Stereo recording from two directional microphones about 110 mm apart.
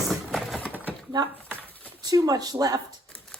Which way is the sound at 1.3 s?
15° left (ahead or behind).